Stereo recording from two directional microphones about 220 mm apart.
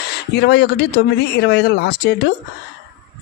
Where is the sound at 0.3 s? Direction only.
50° left (ahead or behind).